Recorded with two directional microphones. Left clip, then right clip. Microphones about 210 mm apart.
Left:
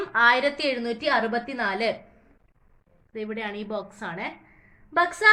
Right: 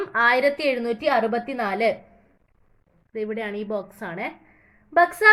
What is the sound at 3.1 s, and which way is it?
A woman's voice, 25° right (ahead or behind).